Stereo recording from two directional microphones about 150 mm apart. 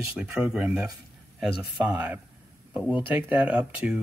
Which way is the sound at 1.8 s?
15° right (ahead or behind).